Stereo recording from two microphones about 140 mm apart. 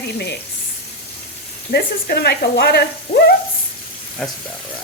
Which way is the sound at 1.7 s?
90° left.